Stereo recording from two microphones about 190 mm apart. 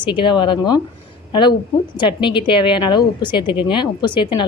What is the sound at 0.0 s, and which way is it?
Speech, 25° left (ahead or behind).